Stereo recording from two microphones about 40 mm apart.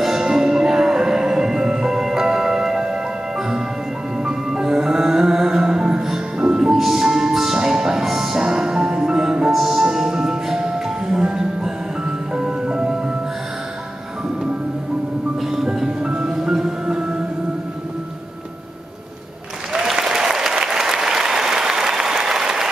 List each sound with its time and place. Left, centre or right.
0.0 s music: centre
9.5 s music: centre; by 13.0 s right
15.5 s music: centre
16.1 s music: right
19.7 s applause: centre